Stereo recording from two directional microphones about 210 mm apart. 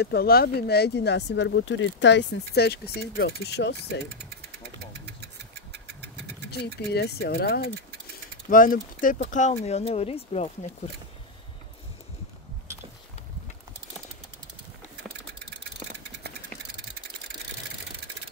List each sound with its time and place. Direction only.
0.0 s speech: 50° left (ahead or behind)
5.0 s engine: 50° right (ahead or behind)
6.5 s speech: 50° left (ahead or behind); by 10.7 s 30° left (ahead or behind)